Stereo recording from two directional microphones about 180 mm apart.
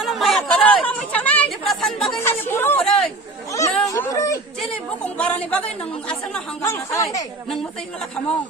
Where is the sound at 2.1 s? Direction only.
10° left (ahead or behind).